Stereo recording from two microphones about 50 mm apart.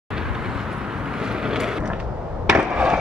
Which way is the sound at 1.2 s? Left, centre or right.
Centre.